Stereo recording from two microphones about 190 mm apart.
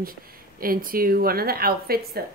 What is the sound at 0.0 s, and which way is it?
Speech, 50° right (ahead or behind).